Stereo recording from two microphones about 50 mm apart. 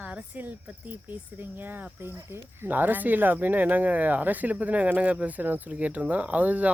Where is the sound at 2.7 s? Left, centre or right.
Right.